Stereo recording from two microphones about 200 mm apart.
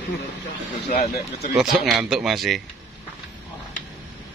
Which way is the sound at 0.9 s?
50° left (ahead or behind).